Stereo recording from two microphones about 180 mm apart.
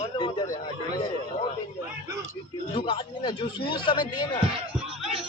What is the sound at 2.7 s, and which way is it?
Speech, 30° left (ahead or behind).